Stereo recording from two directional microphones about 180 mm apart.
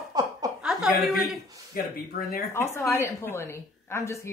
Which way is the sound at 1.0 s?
Centre (ahead or behind).